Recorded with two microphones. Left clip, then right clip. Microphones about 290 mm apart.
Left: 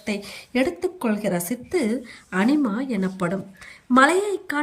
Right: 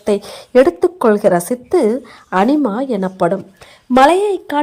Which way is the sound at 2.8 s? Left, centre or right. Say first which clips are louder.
Right 10 dB; centre.